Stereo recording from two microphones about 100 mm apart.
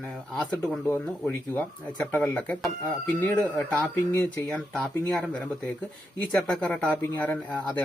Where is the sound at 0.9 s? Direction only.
25° left (ahead or behind).